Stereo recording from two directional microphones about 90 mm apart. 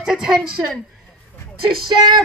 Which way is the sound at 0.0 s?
5° right (ahead or behind).